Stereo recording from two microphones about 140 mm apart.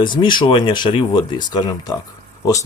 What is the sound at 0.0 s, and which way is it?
Speech, 35° left (ahead or behind).